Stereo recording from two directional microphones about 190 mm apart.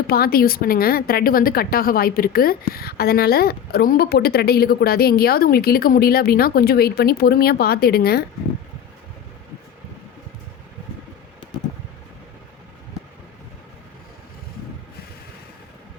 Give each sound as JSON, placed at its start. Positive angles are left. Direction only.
{"t": 0.1, "sound": "a woman's voice", "side_deg": 50}